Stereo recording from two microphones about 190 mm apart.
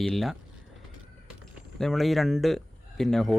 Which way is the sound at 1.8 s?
Centre (ahead or behind).